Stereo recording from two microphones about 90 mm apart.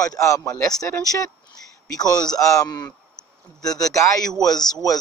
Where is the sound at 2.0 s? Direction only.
45° left (ahead or behind).